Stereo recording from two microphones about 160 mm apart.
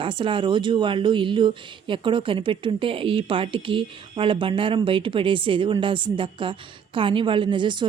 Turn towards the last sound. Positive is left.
turn(degrees=-30)  # may be behind; listen again after turning